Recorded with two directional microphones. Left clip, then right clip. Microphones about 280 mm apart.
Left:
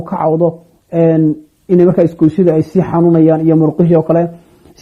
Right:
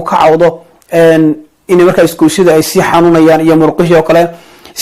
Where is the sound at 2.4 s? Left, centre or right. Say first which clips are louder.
Right 8 dB; centre.